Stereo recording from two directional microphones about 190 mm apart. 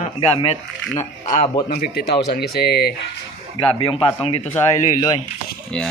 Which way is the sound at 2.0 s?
60° left (ahead or behind).